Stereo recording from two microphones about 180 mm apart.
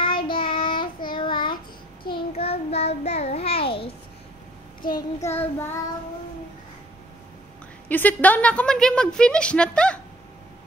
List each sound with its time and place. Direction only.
0.0 s child singing: 30° left (ahead or behind)
4.9 s child singing: 15° left (ahead or behind)
7.9 s a woman's voice: 10° left (ahead or behind)